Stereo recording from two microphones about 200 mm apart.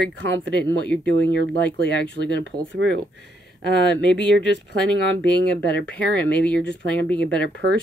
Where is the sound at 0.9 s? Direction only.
5° left (ahead or behind).